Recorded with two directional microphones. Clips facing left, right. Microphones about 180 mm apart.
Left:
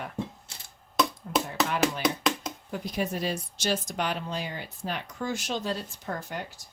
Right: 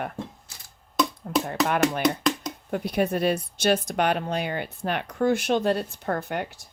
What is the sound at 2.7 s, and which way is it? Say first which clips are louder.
Speech: right 7 dB; 60° right (ahead or behind).